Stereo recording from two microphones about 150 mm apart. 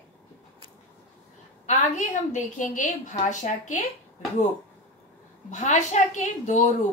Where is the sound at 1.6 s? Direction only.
50° left (ahead or behind).